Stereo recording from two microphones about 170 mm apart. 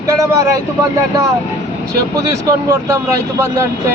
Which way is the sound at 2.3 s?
20° right (ahead or behind).